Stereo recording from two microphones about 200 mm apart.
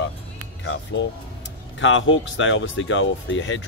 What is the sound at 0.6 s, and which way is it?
Speech, 65° left (ahead or behind).